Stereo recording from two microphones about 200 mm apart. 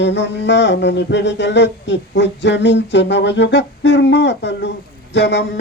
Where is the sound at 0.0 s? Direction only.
60° left (ahead or behind).